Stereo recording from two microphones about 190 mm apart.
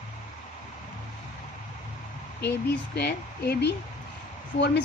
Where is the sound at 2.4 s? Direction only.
60° left (ahead or behind).